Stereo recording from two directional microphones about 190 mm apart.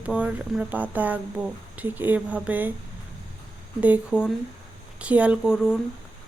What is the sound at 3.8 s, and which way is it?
Speech, 5° right (ahead or behind).